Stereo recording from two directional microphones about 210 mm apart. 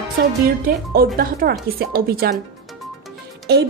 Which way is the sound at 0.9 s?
45° right (ahead or behind).